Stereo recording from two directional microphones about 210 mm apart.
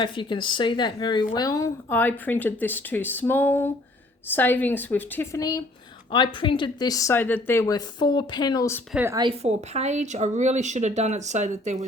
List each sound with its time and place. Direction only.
0.0 s a woman's voice: 20° left (ahead or behind)
8.9 s a woman's voice: 10° right (ahead or behind)
9.1 s a woman's voice: 25° right (ahead or behind)